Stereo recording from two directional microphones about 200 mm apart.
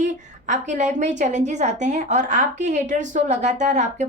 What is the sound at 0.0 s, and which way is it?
A woman's voice, 35° right (ahead or behind).